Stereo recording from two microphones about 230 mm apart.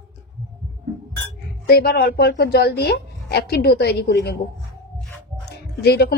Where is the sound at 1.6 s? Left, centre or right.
Left.